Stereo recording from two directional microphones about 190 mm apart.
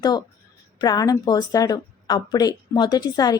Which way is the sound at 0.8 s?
20° left (ahead or behind).